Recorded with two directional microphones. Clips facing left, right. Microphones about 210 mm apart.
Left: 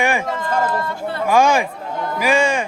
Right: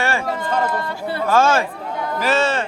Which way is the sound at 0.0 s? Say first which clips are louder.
Left 2 dB; 15° left (ahead or behind).